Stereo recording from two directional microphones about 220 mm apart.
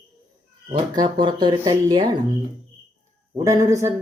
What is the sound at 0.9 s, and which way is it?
Speech, 20° right (ahead or behind).